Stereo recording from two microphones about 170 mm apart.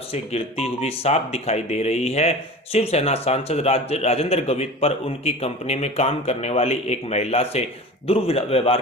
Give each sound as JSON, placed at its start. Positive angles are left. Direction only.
{"t": 0.1, "sound": "a man's voice", "side_deg": 35}